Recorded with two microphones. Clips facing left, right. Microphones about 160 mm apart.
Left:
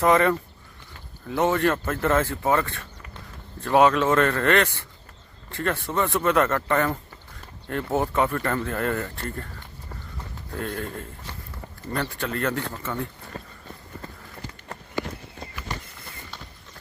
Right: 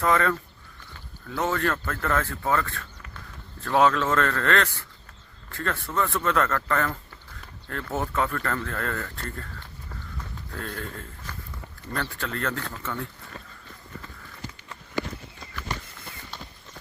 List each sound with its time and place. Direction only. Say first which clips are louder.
0.0 s speech: left 4 dB; 20° left (ahead or behind)
7.9 s speech: left 4 dB; 15° left (ahead or behind)
10.5 s speech: left 5 dB; 10° left (ahead or behind)
13.3 s run: left 6 dB; 40° left (ahead or behind)